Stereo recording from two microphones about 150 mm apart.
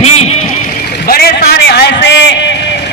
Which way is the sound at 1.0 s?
90° left.